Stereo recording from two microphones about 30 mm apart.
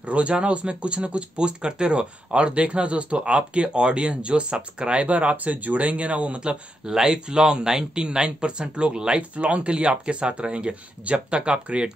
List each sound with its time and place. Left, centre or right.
0.1 s speech: right
6.9 s speech: right
9.4 s speech: right